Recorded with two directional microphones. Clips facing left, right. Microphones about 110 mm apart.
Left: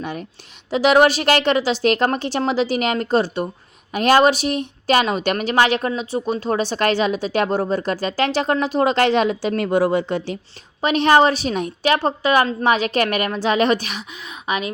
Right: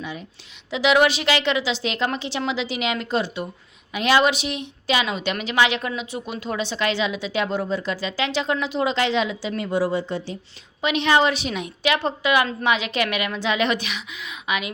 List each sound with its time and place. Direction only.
0.0 s speech: 55° left (ahead or behind)
10.8 s a woman's voice: 40° left (ahead or behind)